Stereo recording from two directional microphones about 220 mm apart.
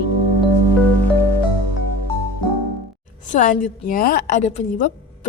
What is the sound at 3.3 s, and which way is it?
A woman's voice, 35° left (ahead or behind).